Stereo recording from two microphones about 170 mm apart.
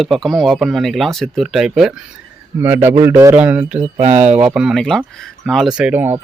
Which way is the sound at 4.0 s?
45° right (ahead or behind).